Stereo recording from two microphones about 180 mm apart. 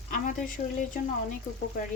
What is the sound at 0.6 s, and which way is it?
Speech, 50° left (ahead or behind).